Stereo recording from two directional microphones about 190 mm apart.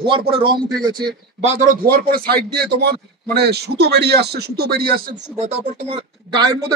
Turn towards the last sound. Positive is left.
turn(degrees=-25)  # may be behind; listen again after turning